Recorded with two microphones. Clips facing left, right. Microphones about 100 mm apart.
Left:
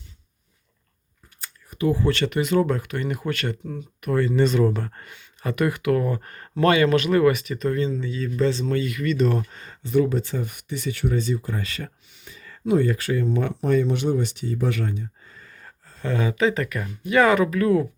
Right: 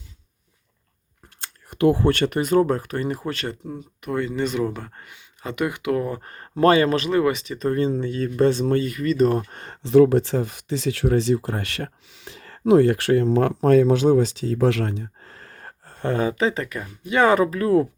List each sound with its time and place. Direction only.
1.4 s speech: 80° right; by 7.8 s 30° right (ahead or behind)
7.8 s speech: 55° right (ahead or behind)
9.5 s speech: 60° right (ahead or behind); by 13.5 s 90° right
14.3 s a sound: 90° right; by 16.2 s 55° right (ahead or behind)
16.2 s speech: 30° right (ahead or behind)